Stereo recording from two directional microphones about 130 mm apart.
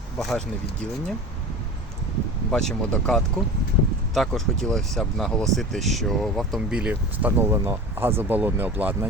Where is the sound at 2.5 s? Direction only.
5° left (ahead or behind); by 9.1 s 15° right (ahead or behind).